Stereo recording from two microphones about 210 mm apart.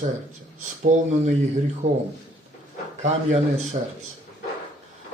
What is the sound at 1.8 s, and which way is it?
Speech, 35° right (ahead or behind).